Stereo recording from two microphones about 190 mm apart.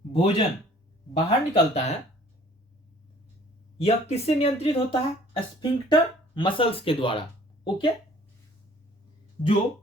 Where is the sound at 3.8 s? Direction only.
35° left (ahead or behind).